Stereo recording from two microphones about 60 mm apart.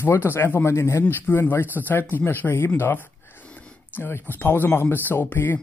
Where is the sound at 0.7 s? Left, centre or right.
Left.